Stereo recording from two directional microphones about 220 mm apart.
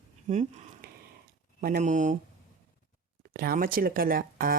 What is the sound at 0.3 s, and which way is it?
Speech, 35° right (ahead or behind).